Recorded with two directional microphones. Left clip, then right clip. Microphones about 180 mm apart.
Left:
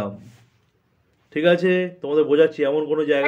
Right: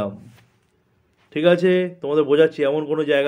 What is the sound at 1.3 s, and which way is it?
A man's voice, 25° right (ahead or behind).